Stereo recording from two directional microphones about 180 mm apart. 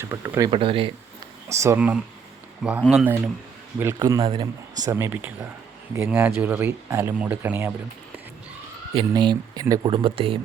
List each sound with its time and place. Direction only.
0.0 s speech: 15° right (ahead or behind)
0.5 s speech: 30° right (ahead or behind)
1.5 s speech: 15° right (ahead or behind)
8.9 s speech: 25° right (ahead or behind)